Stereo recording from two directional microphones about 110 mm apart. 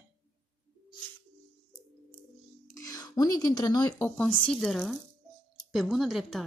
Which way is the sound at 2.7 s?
35° left (ahead or behind).